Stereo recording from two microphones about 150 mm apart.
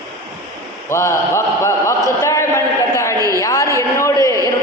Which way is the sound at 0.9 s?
20° left (ahead or behind).